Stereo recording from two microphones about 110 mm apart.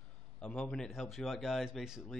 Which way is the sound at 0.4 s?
10° left (ahead or behind).